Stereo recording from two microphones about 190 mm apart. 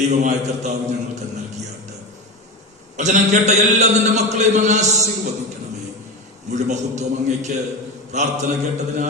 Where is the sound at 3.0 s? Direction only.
40° right (ahead or behind).